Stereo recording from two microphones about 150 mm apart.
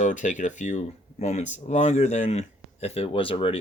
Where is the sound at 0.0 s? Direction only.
55° left (ahead or behind).